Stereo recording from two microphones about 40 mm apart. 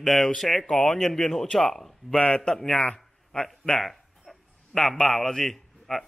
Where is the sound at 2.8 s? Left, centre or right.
Left.